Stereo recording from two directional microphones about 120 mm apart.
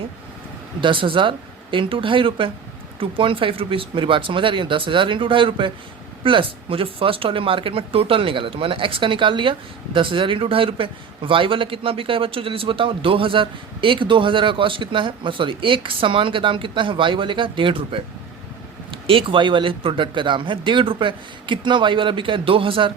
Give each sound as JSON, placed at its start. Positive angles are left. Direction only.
{"t": 0.8, "sound": "speech", "side_deg": -45}
{"t": 19.0, "sound": "speech", "side_deg": -45}